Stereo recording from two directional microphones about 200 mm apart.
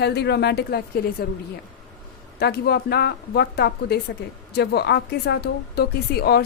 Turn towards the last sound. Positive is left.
turn(degrees=50)  # may be behind; listen again after turning